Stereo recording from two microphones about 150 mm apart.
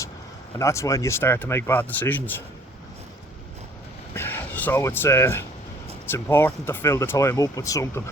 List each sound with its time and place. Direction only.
0.6 s speech: 20° left (ahead or behind)
4.1 s speech: 15° left (ahead or behind)